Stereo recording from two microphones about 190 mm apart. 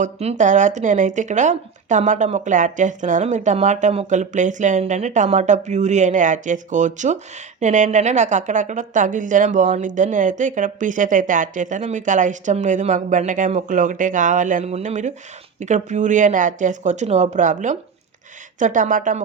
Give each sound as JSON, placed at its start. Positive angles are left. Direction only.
{"t": 0.0, "sound": "speech", "side_deg": -35}